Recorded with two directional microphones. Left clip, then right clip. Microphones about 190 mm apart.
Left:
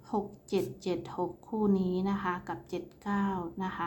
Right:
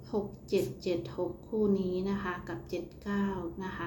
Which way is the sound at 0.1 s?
30° left (ahead or behind).